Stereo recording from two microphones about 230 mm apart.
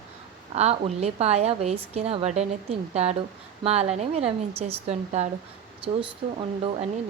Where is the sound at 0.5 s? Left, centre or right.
Right.